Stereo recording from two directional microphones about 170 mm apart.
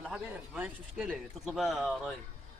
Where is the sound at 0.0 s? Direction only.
5° right (ahead or behind).